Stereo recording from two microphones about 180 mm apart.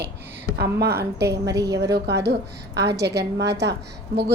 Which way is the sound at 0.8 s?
65° right (ahead or behind).